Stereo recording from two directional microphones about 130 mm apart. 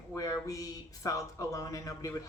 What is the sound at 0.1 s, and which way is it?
Speech, 30° left (ahead or behind).